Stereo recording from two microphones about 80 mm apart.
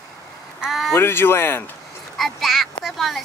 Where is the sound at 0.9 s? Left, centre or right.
Left.